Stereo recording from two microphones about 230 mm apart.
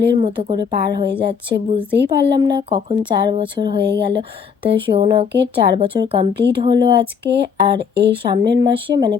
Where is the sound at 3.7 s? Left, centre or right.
Right.